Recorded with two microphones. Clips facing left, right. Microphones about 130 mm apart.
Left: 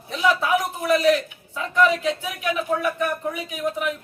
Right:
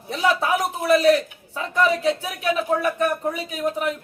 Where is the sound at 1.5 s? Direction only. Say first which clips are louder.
Left 1 dB; 35° right (ahead or behind).